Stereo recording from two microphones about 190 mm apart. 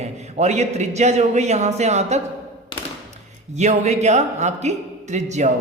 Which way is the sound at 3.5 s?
35° right (ahead or behind).